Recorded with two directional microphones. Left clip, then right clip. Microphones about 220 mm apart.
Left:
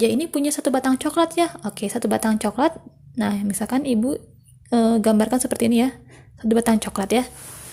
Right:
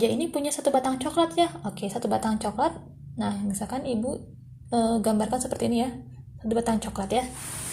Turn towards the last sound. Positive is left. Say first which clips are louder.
# left 5 dB
turn(degrees=50)  # may be behind; listen again after turning